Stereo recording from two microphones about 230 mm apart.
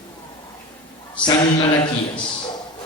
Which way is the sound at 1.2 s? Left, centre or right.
Centre.